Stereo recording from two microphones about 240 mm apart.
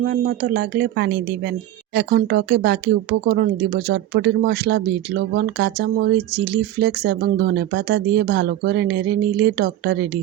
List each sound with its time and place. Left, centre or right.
0.1 s speech: right